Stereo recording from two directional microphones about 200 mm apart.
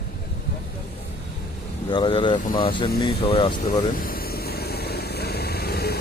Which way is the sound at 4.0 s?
45° left (ahead or behind).